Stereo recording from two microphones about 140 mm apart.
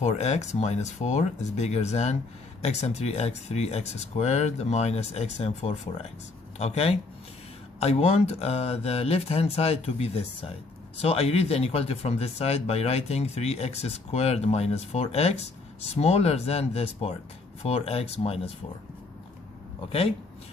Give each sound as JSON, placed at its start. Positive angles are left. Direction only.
{"t": 0.0, "sound": "speech", "side_deg": 55}
{"t": 19.9, "sound": "speech", "side_deg": 45}